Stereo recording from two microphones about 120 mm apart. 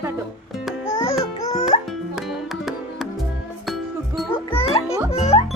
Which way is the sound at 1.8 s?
Centre (ahead or behind).